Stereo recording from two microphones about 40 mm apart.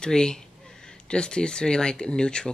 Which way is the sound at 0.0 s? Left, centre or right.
Centre.